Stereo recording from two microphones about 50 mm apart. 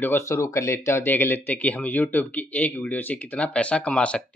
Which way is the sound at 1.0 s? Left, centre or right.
Left.